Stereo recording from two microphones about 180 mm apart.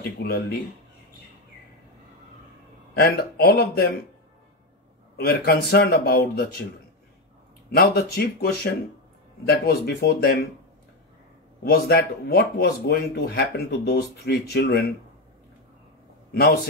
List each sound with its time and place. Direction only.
0.2 s speech: 60° left (ahead or behind)
3.0 s speech: 60° left (ahead or behind)
5.1 s speech: 60° left (ahead or behind)
7.7 s speech: 55° left (ahead or behind)
11.6 s speech: 60° left (ahead or behind)